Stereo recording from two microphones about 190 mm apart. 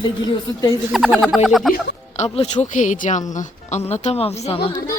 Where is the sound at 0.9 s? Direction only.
Centre (ahead or behind).